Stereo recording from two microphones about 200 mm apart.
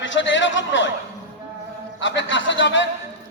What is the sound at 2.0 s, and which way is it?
Speech, 65° left (ahead or behind).